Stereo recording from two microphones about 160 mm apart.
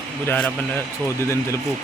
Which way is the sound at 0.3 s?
10° left (ahead or behind).